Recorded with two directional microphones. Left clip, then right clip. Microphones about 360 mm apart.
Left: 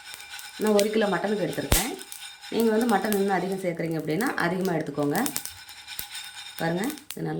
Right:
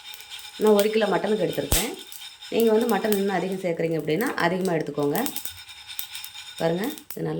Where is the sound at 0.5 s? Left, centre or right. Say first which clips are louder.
Right 3 dB; centre.